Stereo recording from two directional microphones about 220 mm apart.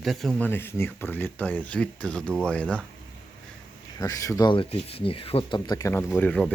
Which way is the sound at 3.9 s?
15° left (ahead or behind).